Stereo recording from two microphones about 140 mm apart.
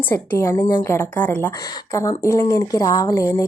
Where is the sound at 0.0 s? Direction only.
15° left (ahead or behind).